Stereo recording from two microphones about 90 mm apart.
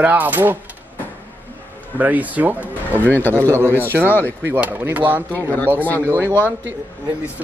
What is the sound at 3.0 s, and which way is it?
Speech, 20° left (ahead or behind).